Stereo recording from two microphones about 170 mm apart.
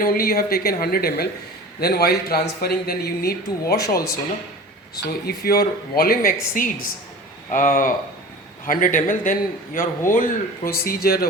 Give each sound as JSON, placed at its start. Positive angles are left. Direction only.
{"t": 0.0, "sound": "speech", "side_deg": 60}
{"t": 5.2, "sound": "a man's voice", "side_deg": 70}